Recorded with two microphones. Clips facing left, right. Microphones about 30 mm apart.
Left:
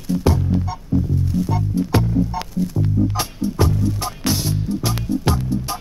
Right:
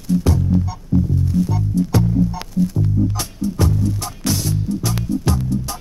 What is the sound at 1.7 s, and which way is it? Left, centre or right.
Music, left.